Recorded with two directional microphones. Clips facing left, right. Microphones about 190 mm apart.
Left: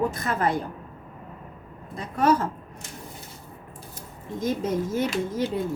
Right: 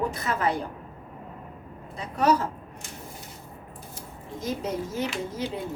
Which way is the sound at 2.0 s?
50° left (ahead or behind).